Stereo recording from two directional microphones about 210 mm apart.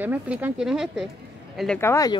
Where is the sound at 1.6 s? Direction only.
5° left (ahead or behind).